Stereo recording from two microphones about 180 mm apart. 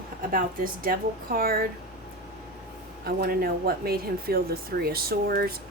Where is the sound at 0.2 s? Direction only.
50° right (ahead or behind).